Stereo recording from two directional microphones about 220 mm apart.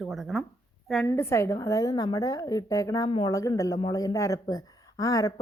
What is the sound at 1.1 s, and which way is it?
Speech, 10° left (ahead or behind).